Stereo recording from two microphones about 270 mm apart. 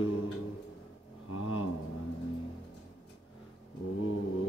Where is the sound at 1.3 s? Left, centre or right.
Left.